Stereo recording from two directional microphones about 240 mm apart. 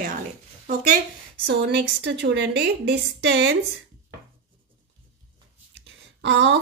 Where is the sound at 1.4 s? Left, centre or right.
Right.